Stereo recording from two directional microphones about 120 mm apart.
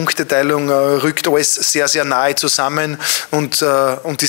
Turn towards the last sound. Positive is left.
turn(degrees=25)  # may be behind; listen again after turning